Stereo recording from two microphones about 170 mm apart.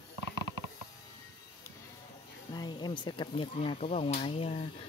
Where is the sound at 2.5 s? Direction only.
25° left (ahead or behind).